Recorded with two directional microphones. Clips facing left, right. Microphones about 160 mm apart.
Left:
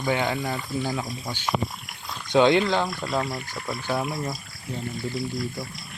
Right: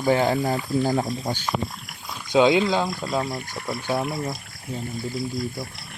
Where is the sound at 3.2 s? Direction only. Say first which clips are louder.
Right 2 dB; 45° right (ahead or behind).